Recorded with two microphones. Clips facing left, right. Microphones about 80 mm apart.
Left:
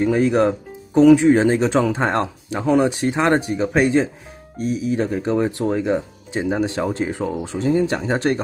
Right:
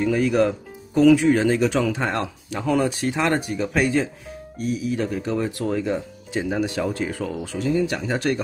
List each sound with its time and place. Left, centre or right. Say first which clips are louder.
0.0 s speech: left 3 dB; left